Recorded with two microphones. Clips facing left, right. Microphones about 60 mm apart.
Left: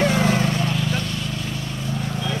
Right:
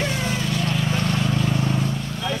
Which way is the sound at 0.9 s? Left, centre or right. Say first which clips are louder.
Right 3 dB; right.